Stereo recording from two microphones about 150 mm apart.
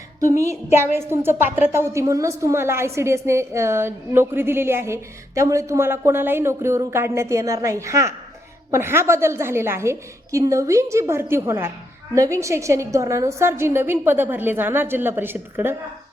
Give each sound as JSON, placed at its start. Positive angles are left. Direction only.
{"t": 0.3, "sound": "a woman's voice", "side_deg": -20}